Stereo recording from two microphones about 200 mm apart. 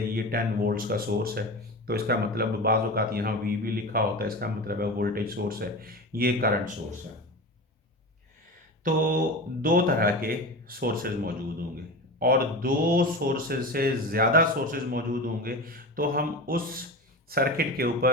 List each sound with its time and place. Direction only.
0.1 s a man's voice: 45° right (ahead or behind)
8.8 s a man's voice: 45° right (ahead or behind)